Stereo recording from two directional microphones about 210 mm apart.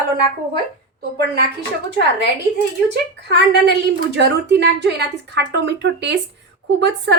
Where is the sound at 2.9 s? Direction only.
55° right (ahead or behind).